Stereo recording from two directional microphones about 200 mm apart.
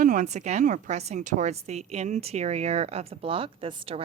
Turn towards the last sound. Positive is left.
turn(degrees=-25)  # may be behind; listen again after turning